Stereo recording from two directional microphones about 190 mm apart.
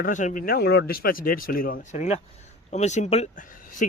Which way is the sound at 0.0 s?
40° left (ahead or behind).